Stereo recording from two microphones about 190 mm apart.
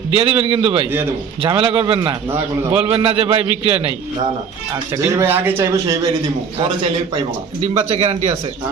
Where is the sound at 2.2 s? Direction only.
10° right (ahead or behind).